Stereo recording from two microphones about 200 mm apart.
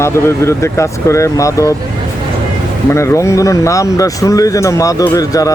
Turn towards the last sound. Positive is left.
turn(degrees=15)  # may be behind; listen again after turning